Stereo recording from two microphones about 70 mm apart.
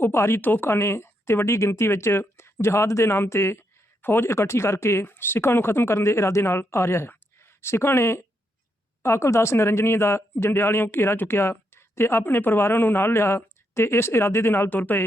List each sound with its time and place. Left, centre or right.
0.0 s speech: left